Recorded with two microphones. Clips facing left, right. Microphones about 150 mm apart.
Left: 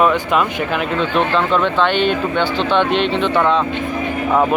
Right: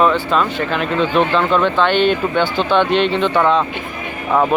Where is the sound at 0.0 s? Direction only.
10° left (ahead or behind).